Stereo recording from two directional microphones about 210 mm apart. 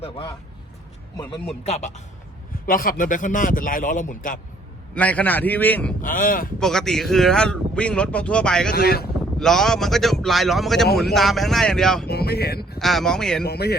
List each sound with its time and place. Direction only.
1.1 s a man's voice: 20° left (ahead or behind)
1.6 s a man's voice: 30° left (ahead or behind)
4.9 s speech: 5° left (ahead or behind)
6.0 s a man's voice: 40° left (ahead or behind)
6.6 s speech: centre (ahead or behind)
8.7 s speech: 50° left (ahead or behind)
9.4 s speech: centre (ahead or behind)
12.0 s speech: 50° left (ahead or behind)
12.8 s speech: centre (ahead or behind)
13.4 s speech: 50° left (ahead or behind)